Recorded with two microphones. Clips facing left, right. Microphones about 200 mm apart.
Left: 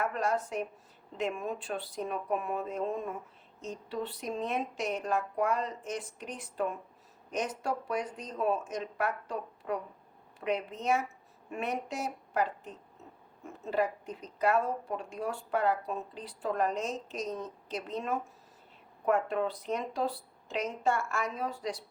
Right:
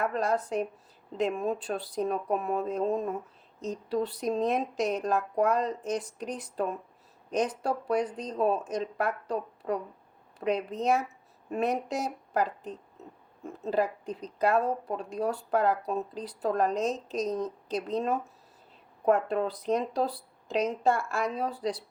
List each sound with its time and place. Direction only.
0.0 s a woman's voice: 35° right (ahead or behind)